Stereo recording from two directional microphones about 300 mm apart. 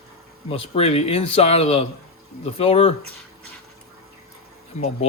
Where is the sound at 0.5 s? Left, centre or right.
Centre.